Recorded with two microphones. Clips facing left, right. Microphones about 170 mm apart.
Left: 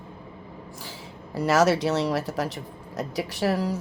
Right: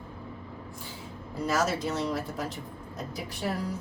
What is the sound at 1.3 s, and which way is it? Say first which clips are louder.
Speech: left 7 dB; 80° left.